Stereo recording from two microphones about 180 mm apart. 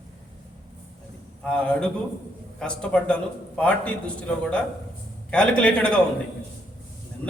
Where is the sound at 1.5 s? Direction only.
5° left (ahead or behind).